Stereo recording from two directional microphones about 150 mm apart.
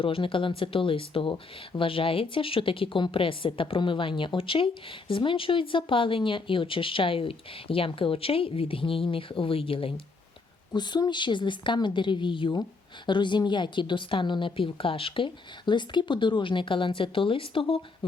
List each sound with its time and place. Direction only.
0.0 s speech: 35° left (ahead or behind)